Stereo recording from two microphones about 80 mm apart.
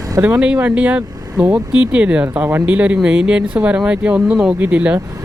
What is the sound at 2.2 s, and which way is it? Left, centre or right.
Speech, right.